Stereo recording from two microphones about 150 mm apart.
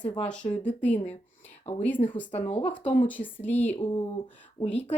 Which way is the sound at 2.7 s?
10° left (ahead or behind).